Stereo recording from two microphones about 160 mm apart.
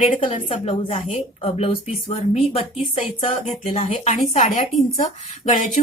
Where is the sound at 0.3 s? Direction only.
40° left (ahead or behind).